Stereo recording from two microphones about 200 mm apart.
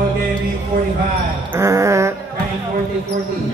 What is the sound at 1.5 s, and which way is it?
Music, 15° right (ahead or behind).